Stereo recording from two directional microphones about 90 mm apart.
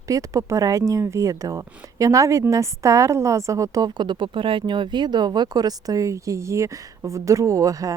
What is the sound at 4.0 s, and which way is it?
Speech, 60° right (ahead or behind).